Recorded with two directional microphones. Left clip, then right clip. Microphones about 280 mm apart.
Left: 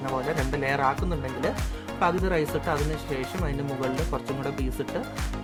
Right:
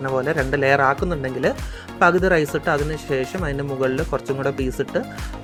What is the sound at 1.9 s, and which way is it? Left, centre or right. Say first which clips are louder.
Speech: right 9 dB; centre.